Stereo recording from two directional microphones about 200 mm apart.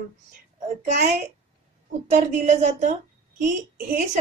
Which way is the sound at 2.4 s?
35° right (ahead or behind).